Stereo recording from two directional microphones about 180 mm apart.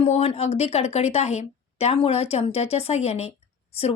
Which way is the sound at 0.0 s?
30° left (ahead or behind).